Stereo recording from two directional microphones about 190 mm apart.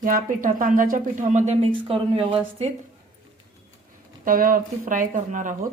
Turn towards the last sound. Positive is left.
turn(degrees=-40)  # may be behind; listen again after turning